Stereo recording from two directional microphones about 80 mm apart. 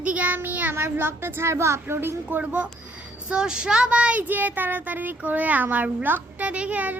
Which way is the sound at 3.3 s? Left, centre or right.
Centre.